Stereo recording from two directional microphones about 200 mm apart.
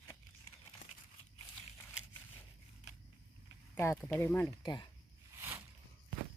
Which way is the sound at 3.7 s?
10° left (ahead or behind).